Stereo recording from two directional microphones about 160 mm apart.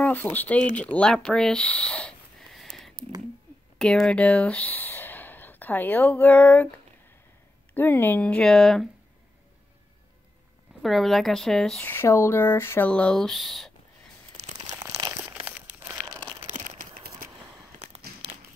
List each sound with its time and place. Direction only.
0.0 s speech: 10° left (ahead or behind)
7.7 s speech: 15° left (ahead or behind)
10.8 s speech: centre (ahead or behind)
14.3 s crumpling: 45° right (ahead or behind)
14.7 s crumpling: 25° right (ahead or behind)
15.2 s crumpling: 10° right (ahead or behind)
16.4 s a sound: 50° right (ahead or behind)
17.7 s crumpling: 40° right (ahead or behind)